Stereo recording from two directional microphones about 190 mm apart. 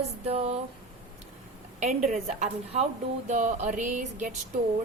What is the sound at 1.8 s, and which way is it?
Speech, 40° right (ahead or behind).